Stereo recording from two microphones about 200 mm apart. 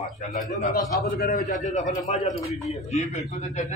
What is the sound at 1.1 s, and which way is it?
A man's voice, 45° left (ahead or behind).